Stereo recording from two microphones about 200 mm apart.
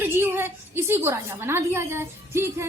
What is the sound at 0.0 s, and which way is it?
A woman's voice, 10° right (ahead or behind).